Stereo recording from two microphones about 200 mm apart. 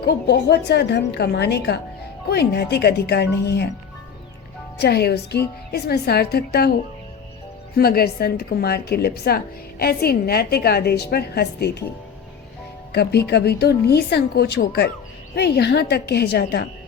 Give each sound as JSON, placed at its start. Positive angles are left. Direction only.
{"t": 0.0, "sound": "a woman's voice", "side_deg": 55}
{"t": 4.8, "sound": "a woman's voice", "side_deg": 55}
{"t": 7.8, "sound": "a woman's voice", "side_deg": 50}
{"t": 12.9, "sound": "a woman's voice", "side_deg": 55}